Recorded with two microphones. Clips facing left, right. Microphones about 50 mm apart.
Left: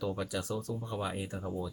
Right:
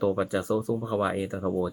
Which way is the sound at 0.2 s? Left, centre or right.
Right.